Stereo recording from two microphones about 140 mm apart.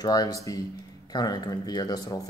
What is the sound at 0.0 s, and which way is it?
Speech, 25° left (ahead or behind).